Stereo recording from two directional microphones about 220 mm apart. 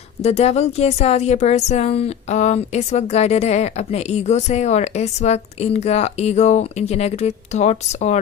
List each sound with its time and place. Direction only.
0.2 s a woman's voice: 30° left (ahead or behind)